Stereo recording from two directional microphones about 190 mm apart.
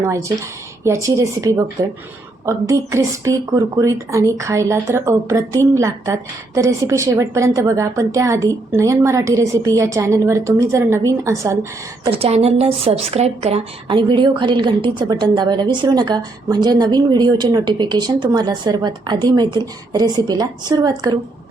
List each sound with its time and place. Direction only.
0.0 s a woman's voice: 15° right (ahead or behind)
12.1 s speech: 30° right (ahead or behind)